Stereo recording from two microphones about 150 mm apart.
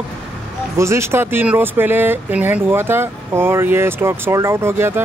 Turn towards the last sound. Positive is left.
turn(degrees=-15)  # may be behind; listen again after turning